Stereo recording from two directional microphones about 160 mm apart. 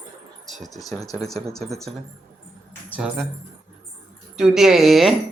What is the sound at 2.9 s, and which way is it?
Speech, 10° right (ahead or behind).